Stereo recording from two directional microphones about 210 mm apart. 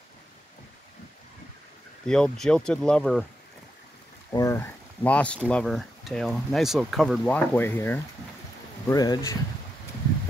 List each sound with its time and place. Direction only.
2.0 s speech: 5° left (ahead or behind)
4.3 s speech: 15° left (ahead or behind)